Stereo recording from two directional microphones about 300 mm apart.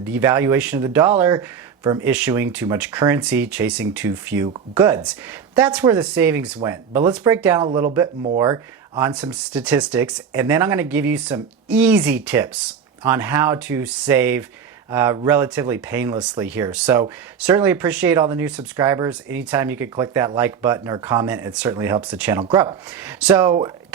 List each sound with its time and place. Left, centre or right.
0.1 s speech: centre